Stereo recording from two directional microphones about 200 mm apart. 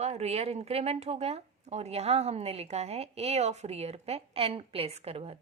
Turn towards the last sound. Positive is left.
turn(degrees=-30)  # may be behind; listen again after turning